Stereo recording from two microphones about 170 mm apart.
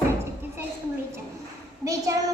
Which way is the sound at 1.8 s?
20° right (ahead or behind).